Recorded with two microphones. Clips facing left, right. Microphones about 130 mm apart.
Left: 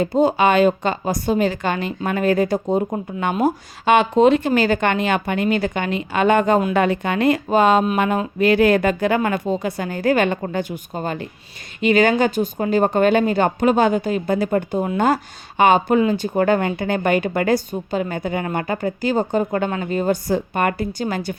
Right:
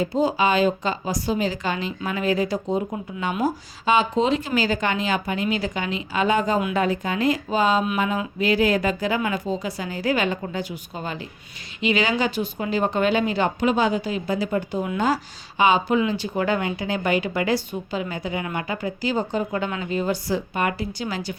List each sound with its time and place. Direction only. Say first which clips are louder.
0.0 s speech: left 5 dB; 55° left (ahead or behind)